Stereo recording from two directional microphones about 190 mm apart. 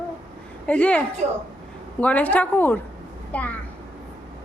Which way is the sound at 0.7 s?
5° left (ahead or behind).